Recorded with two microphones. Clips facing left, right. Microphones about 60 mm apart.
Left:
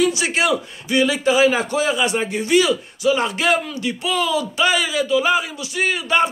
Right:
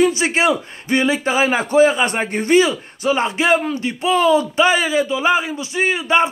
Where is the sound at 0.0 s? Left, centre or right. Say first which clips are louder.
Right 3 dB; right.